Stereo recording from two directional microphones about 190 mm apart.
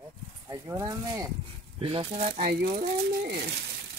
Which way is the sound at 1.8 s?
30° right (ahead or behind).